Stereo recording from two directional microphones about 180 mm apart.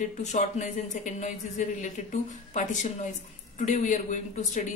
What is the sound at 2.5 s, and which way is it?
Speech, 40° left (ahead or behind).